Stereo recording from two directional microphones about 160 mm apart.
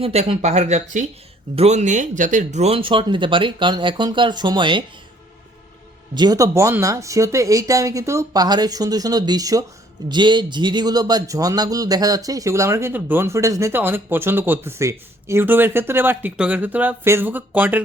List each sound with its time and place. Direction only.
0.0 s speech: 40° right (ahead or behind)
6.1 s speech: 25° right (ahead or behind)